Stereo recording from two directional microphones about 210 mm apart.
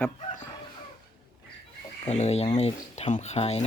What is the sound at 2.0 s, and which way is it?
Speech, 30° left (ahead or behind).